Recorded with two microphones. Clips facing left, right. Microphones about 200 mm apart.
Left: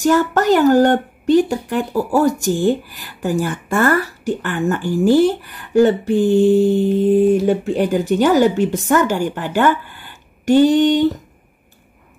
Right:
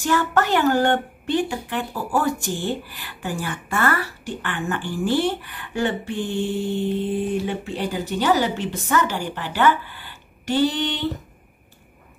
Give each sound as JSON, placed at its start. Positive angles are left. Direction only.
{"t": 0.0, "sound": "speech", "side_deg": 45}